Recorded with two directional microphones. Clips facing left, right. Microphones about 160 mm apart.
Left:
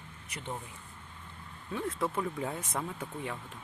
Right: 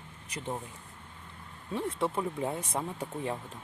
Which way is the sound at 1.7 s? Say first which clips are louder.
Right 2 dB; 30° right (ahead or behind).